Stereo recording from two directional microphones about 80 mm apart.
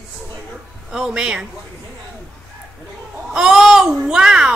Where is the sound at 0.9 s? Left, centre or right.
Centre.